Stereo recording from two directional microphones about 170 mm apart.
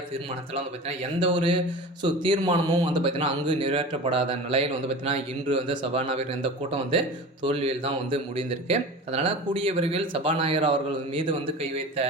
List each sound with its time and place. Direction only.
0.5 s speech: 35° right (ahead or behind)